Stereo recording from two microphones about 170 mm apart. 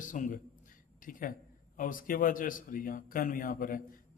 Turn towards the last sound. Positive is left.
turn(degrees=55)  # may be behind; listen again after turning